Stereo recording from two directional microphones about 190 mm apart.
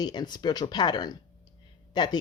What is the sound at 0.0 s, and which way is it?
Speech, 20° left (ahead or behind).